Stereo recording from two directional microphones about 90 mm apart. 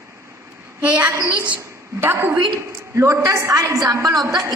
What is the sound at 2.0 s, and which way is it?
A woman's voice, 25° right (ahead or behind).